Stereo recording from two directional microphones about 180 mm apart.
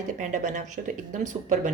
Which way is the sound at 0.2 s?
45° right (ahead or behind).